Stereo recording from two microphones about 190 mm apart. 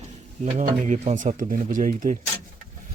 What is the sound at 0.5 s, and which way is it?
Speech, 40° right (ahead or behind).